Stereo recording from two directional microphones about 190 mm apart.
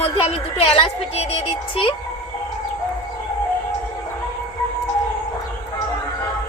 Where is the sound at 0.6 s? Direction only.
30° left (ahead or behind).